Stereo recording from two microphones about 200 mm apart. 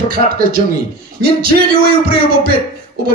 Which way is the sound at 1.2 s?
50° right (ahead or behind).